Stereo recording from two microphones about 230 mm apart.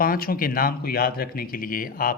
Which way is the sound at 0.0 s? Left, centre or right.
Left.